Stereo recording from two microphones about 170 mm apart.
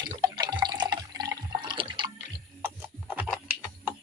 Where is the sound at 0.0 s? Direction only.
25° right (ahead or behind).